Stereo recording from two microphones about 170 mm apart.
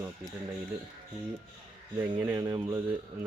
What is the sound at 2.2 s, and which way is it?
Speech, 15° right (ahead or behind).